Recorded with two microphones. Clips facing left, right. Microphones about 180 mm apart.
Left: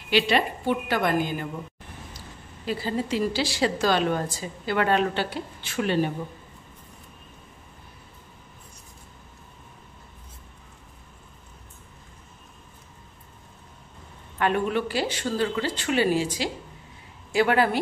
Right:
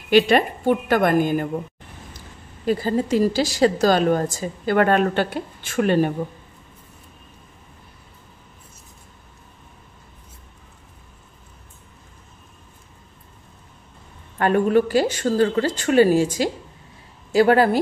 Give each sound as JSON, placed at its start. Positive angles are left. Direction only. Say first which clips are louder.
{"t": 0.1, "sound": "a woman's voice", "louder": "right 7 dB", "side_deg": -50}
{"t": 2.6, "sound": "a woman's voice", "louder": "right 7 dB", "side_deg": -45}
{"t": 14.4, "sound": "a woman's voice", "louder": "right 7 dB", "side_deg": -40}